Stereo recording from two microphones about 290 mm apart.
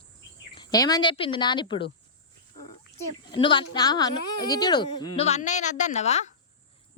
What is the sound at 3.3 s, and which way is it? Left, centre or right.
A woman's voice, centre.